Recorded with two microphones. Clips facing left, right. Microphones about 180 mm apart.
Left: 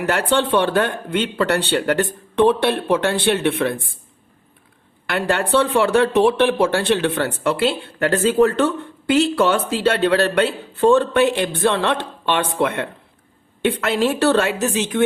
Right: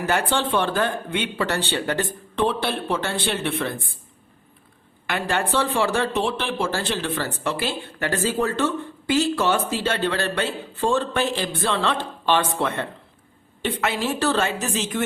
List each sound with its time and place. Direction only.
0.1 s speech: 65° left (ahead or behind)
5.2 s speech: 65° left (ahead or behind)
13.9 s speech: 65° left (ahead or behind)